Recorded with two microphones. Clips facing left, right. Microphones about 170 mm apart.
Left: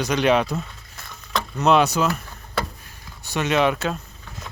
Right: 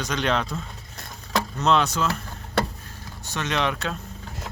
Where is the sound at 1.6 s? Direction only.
10° left (ahead or behind).